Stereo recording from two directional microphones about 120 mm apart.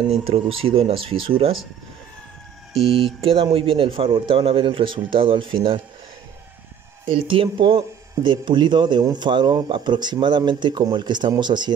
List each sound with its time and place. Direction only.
0.2 s a man's voice: 50° right (ahead or behind)
2.9 s a man's voice: 50° right (ahead or behind)
7.1 s speech: 45° right (ahead or behind)